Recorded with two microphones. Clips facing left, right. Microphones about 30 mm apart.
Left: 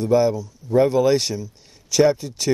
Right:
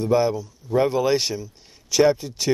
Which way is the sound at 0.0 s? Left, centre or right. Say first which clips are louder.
Left 2 dB; centre.